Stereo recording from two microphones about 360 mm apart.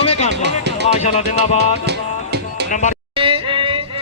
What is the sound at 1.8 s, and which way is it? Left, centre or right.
Music, right.